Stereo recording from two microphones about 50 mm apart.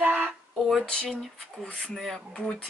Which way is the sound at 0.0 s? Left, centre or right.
Right.